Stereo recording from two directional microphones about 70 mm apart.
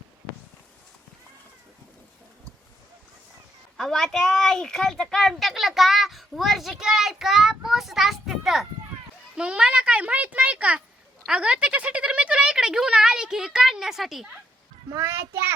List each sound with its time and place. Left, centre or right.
3.8 s a child's voice: centre
9.3 s speech: centre
15.0 s a child's voice: right